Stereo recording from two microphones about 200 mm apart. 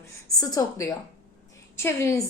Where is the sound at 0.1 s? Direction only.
15° left (ahead or behind).